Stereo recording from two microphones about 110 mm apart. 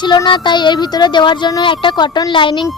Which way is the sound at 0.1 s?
40° left (ahead or behind).